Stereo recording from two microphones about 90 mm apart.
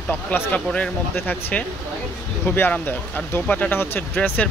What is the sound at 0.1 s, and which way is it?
Speech, 20° left (ahead or behind).